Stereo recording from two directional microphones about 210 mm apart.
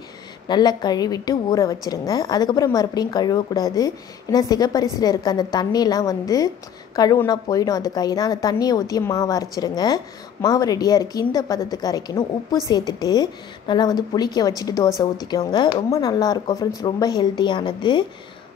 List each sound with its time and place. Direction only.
0.5 s a woman's voice: 20° left (ahead or behind)